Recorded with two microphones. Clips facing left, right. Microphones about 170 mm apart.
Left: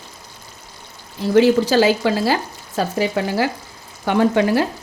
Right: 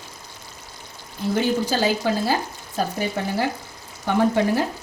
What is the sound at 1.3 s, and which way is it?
Speech, 90° left.